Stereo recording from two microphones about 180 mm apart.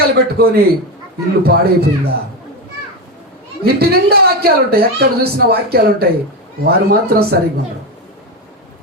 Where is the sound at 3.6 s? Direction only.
60° right (ahead or behind).